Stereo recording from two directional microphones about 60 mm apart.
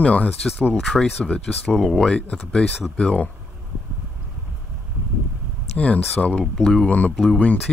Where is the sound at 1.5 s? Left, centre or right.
Centre.